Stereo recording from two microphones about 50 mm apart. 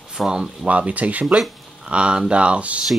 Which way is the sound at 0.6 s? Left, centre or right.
Right.